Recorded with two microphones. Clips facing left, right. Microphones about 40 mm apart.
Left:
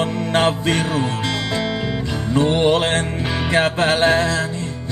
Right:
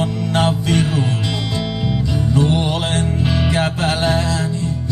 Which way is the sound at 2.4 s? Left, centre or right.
Left.